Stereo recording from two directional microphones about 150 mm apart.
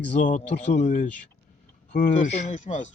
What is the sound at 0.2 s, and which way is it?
Speech, 55° left (ahead or behind).